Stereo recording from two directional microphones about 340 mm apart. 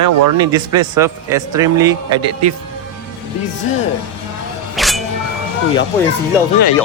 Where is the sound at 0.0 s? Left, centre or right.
Right.